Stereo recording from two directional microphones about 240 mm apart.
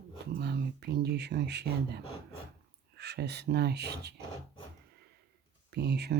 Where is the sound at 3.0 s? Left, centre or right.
Right.